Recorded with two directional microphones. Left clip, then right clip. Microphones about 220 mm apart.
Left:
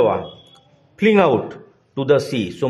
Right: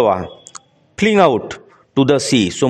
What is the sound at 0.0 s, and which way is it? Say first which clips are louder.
Speech: right 2 dB; 50° right (ahead or behind).